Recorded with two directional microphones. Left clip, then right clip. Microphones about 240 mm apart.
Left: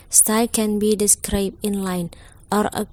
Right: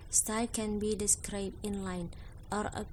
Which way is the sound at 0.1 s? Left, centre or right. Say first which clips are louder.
Left 14 dB; left.